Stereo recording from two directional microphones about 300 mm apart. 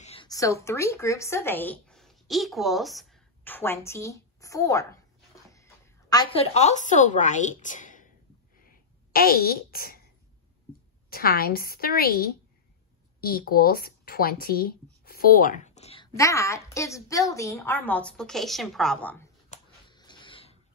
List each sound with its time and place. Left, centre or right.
0.0 s a woman's voice: centre
9.1 s a woman's voice: left
11.1 s a woman's voice: left; by 19.2 s centre
19.5 s a sound: centre